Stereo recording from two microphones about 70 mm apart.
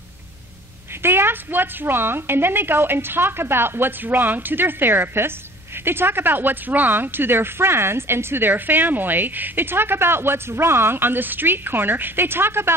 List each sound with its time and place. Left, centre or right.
1.0 s speech: right